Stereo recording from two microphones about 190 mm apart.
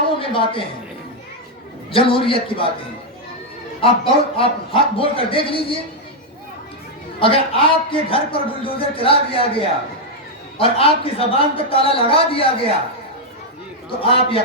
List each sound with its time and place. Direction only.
0.1 s speech: 30° left (ahead or behind)
1.9 s a man's voice: 30° left (ahead or behind)
3.8 s a man's voice: 30° left (ahead or behind)
7.2 s a man's voice: 30° left (ahead or behind)
14.0 s a man's voice: 30° left (ahead or behind)